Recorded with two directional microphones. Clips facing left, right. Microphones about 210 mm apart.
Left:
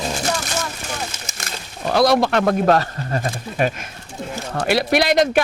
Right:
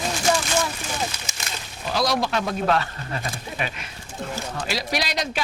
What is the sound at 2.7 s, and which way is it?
Speech, 40° left (ahead or behind).